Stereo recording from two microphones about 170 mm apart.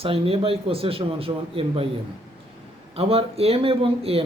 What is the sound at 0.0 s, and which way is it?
Speech, 35° right (ahead or behind).